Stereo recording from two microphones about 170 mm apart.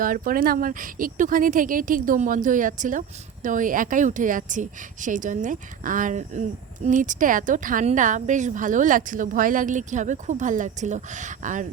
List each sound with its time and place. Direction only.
0.0 s a woman's voice: 55° right (ahead or behind)